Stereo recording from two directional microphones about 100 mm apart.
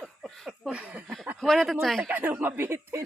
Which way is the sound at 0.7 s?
10° right (ahead or behind).